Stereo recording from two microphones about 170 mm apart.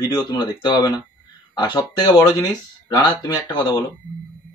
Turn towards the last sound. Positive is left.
turn(degrees=25)  # may be behind; listen again after turning